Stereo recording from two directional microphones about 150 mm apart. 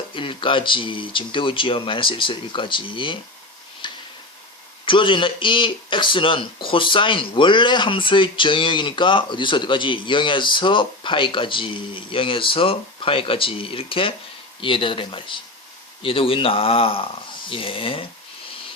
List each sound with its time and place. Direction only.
0.1 s speech: 35° left (ahead or behind)
3.8 s tick-tock: 30° left (ahead or behind)
4.9 s speech: 35° left (ahead or behind)